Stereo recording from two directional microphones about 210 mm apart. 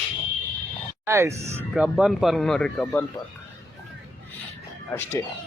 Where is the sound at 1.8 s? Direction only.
Centre (ahead or behind).